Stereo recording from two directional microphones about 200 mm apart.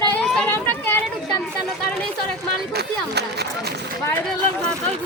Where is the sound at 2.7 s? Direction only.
55° right (ahead or behind).